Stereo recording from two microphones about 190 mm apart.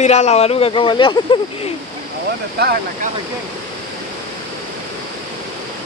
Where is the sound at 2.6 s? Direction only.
55° right (ahead or behind).